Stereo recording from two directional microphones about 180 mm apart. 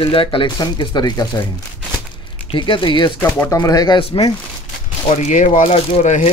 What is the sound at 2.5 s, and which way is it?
Speech, 25° left (ahead or behind).